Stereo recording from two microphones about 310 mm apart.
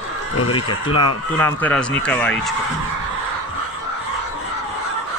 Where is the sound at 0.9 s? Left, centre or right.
Left.